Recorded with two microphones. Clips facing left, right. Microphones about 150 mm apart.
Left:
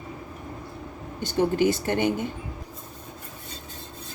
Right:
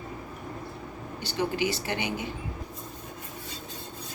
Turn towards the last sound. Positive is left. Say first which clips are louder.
# left 7 dB
turn(degrees=50)  # may be behind; listen again after turning